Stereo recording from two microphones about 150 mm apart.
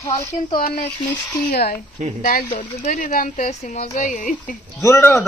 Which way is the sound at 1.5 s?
90° left.